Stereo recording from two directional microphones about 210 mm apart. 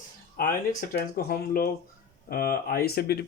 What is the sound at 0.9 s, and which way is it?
Speech, 50° left (ahead or behind).